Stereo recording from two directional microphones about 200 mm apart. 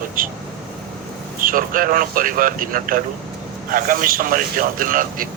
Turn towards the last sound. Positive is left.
turn(degrees=-45)  # may be behind; listen again after turning